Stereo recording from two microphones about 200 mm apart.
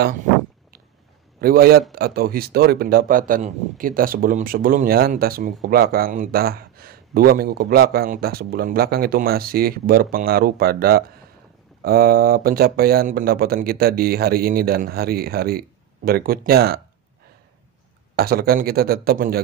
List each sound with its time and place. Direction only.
1.4 s speech: 50° right (ahead or behind)
18.1 s speech: 50° right (ahead or behind)